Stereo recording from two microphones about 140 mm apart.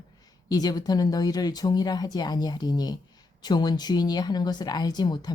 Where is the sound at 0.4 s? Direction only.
25° left (ahead or behind).